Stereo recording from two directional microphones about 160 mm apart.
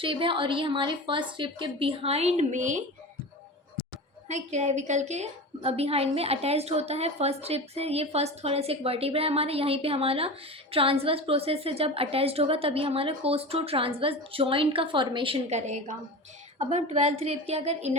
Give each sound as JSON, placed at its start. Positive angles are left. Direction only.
{"t": 0.0, "sound": "a woman's voice", "side_deg": -30}
{"t": 4.3, "sound": "a woman's voice", "side_deg": -45}